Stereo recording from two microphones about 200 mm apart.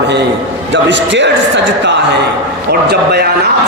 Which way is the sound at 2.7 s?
55° right (ahead or behind).